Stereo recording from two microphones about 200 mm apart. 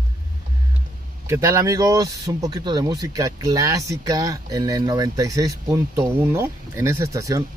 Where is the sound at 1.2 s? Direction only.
15° right (ahead or behind).